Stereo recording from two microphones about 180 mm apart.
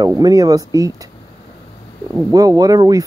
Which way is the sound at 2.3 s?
20° right (ahead or behind).